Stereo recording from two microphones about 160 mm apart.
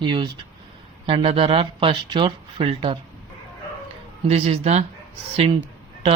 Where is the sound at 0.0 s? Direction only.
30° right (ahead or behind).